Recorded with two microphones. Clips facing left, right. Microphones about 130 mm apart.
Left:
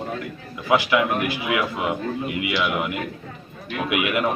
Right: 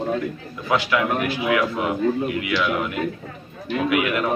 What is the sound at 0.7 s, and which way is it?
A man's voice, 15° left (ahead or behind).